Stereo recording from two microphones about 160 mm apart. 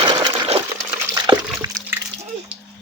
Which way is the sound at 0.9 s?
15° right (ahead or behind).